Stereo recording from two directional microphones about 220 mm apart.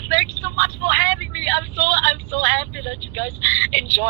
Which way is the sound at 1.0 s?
55° right (ahead or behind).